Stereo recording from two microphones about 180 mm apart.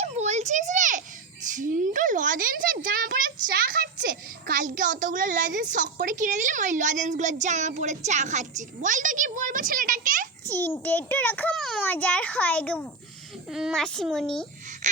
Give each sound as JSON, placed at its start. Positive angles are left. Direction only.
{"t": 0.0, "sound": "a sound", "side_deg": -40}
{"t": 1.5, "sound": "speech", "side_deg": -45}
{"t": 10.5, "sound": "a child's voice", "side_deg": 10}